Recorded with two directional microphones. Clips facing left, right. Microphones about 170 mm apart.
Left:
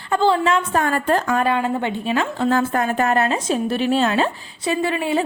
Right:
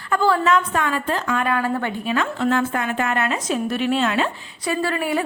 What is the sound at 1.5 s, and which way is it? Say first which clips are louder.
A woman's voice: left 1 dB; 20° left (ahead or behind).